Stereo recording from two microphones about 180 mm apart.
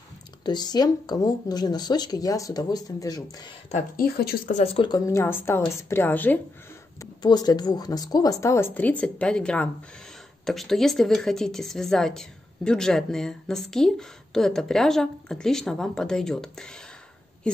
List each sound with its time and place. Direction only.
0.5 s speech: 25° left (ahead or behind)
3.7 s speech: 55° left (ahead or behind)
4.5 s a woman's voice: 35° left (ahead or behind); by 6.4 s 10° left (ahead or behind)
7.0 s a woman's voice: 20° left (ahead or behind); by 16.6 s 5° left (ahead or behind)